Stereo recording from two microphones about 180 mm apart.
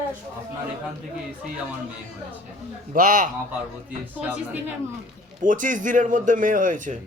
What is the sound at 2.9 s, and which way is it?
Speech, 45° right (ahead or behind).